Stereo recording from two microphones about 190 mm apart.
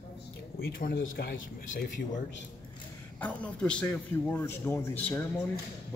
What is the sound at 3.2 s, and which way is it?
A man's voice, 5° left (ahead or behind).